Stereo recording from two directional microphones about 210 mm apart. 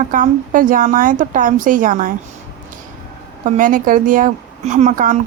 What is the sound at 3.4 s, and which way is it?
A woman's voice, 40° right (ahead or behind).